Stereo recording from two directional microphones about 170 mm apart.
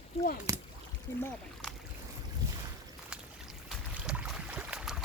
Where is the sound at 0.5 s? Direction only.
20° right (ahead or behind).